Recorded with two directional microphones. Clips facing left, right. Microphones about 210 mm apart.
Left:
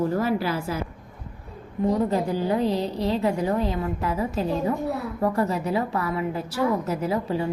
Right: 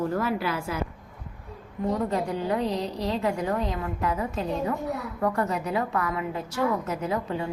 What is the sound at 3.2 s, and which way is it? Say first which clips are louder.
A woman's voice: left 2 dB; 30° left (ahead or behind).